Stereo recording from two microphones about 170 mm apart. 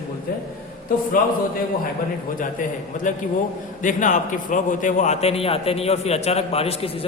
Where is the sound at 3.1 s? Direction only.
50° left (ahead or behind).